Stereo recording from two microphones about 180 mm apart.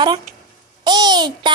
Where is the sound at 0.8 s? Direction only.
25° right (ahead or behind).